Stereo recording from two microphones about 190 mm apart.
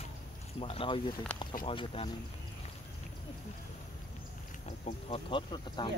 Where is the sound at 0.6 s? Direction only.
30° left (ahead or behind).